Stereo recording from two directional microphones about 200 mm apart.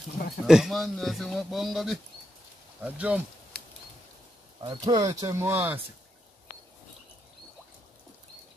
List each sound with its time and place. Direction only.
0.5 s a man's voice: centre (ahead or behind)
4.6 s speech: 20° right (ahead or behind)